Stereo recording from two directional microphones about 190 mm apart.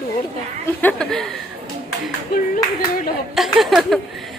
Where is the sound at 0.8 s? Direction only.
5° left (ahead or behind).